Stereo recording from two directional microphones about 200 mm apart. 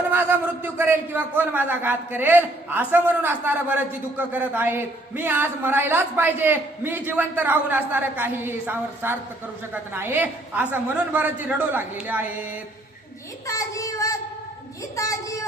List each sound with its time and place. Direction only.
0.1 s a man's voice: 10° right (ahead or behind)
13.5 s child singing: 15° left (ahead or behind)